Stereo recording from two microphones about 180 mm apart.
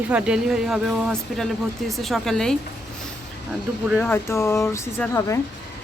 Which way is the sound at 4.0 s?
15° left (ahead or behind).